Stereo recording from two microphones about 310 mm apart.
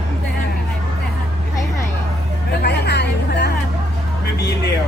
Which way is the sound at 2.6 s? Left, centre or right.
Left.